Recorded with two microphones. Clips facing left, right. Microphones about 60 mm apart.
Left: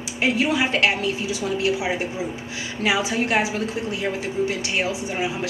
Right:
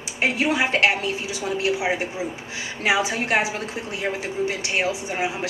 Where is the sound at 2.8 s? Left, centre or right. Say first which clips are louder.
Even; right.